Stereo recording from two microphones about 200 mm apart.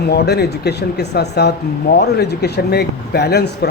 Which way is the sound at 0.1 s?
55° left (ahead or behind).